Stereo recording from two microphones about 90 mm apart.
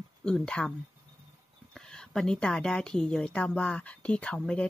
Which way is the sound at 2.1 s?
10° left (ahead or behind).